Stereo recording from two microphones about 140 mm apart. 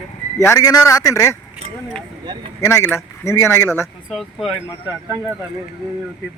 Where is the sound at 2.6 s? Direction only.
15° left (ahead or behind).